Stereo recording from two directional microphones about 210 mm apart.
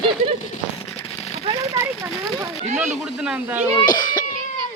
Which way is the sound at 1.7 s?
15° right (ahead or behind).